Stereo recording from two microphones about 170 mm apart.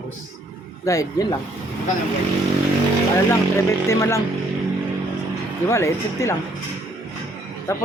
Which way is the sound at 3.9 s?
15° left (ahead or behind).